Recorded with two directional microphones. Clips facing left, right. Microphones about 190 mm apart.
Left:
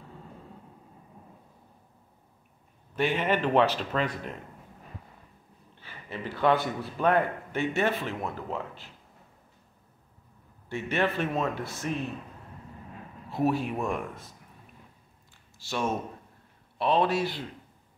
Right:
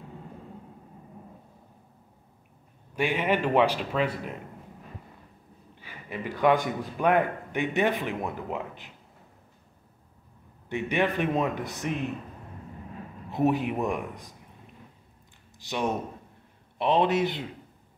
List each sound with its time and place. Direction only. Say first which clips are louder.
3.0 s a man's voice: right 1 dB; 10° right (ahead or behind)
5.8 s a man's voice: right 2 dB; 10° right (ahead or behind)
10.7 s a man's voice: right 2 dB; 15° right (ahead or behind)
13.3 s a man's voice: right 2 dB; 20° right (ahead or behind)
15.6 s a man's voice: right 1 dB; 15° right (ahead or behind)